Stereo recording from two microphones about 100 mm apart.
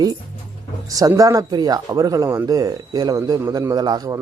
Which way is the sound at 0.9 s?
35° right (ahead or behind).